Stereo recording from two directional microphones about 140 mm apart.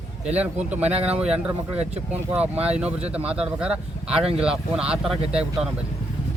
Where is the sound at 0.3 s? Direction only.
10° right (ahead or behind).